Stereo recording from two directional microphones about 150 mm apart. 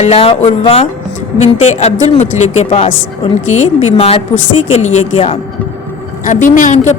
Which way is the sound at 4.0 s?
40° left (ahead or behind).